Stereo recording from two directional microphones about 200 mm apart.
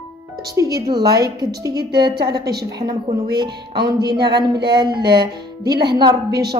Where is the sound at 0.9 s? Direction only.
50° right (ahead or behind).